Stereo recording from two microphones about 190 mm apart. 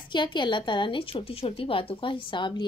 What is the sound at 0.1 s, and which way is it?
Speech, 25° left (ahead or behind).